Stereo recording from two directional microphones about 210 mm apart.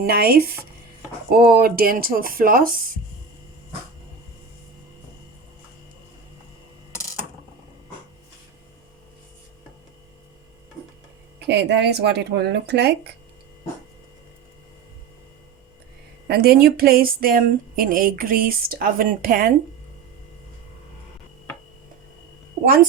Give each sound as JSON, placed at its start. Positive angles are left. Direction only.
{"t": 0.0, "sound": "speech", "side_deg": -45}
{"t": 6.9, "sound": "mechanisms", "side_deg": 15}
{"t": 11.4, "sound": "speech", "side_deg": -55}
{"t": 16.2, "sound": "speech", "side_deg": -50}